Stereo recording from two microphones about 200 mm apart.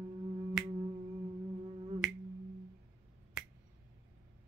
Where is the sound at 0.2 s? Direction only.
30° right (ahead or behind).